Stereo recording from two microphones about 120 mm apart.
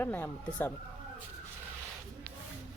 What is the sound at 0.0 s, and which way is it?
Speech, 15° left (ahead or behind).